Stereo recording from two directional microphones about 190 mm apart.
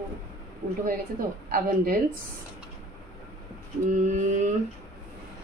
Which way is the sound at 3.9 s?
40° right (ahead or behind).